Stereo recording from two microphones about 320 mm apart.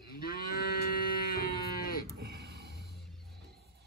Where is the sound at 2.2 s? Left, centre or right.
Right.